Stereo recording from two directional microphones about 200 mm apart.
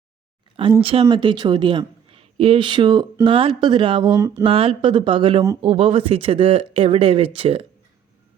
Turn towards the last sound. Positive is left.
turn(degrees=-25)  # may be behind; listen again after turning